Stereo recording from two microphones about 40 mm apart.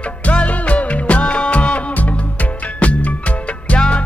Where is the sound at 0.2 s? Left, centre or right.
Left.